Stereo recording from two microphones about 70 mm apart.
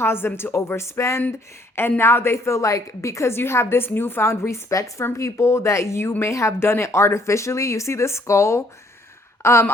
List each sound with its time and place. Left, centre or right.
0.0 s a woman's voice: left
0.8 s a woman's voice: left